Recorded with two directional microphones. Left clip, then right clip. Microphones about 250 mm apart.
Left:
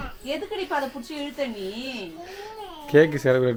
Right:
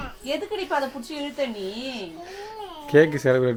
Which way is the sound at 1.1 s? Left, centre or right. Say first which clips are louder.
Right 1 dB; right.